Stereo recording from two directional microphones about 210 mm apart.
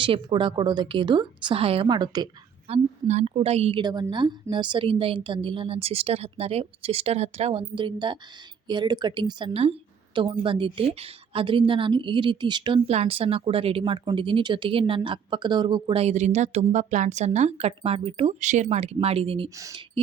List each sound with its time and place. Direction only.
0.0 s a woman's voice: 25° right (ahead or behind)
19.5 s speech: 15° right (ahead or behind)